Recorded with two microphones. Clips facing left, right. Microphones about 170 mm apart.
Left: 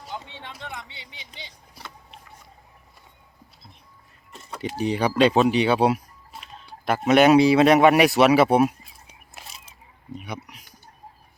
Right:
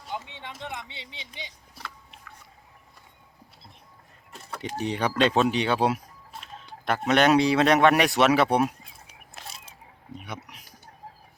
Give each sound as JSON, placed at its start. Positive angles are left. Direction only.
{"t": 0.6, "sound": "speech", "side_deg": -20}
{"t": 4.5, "sound": "speech", "side_deg": 5}
{"t": 10.2, "sound": "speech", "side_deg": 0}